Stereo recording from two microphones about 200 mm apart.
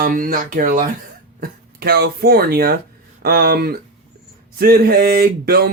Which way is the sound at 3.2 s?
50° right (ahead or behind).